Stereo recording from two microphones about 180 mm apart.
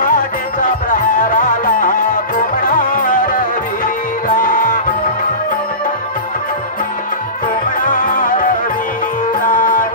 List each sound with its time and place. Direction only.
0.0 s music: 50° left (ahead or behind)
7.8 s music: 50° left (ahead or behind)
9.5 s music: 50° left (ahead or behind)